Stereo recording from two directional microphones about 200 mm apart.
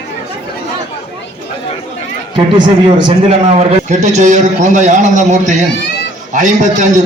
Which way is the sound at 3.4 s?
35° right (ahead or behind).